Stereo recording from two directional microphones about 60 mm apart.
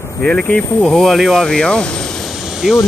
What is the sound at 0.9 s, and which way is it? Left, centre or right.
Speech, centre.